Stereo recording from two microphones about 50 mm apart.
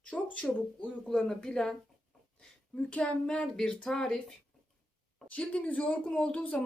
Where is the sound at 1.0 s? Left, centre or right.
Centre.